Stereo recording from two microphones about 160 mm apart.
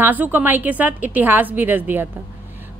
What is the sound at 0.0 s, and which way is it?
Speech, 10° right (ahead or behind).